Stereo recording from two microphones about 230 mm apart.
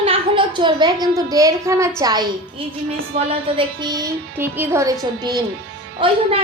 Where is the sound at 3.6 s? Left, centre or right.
Centre.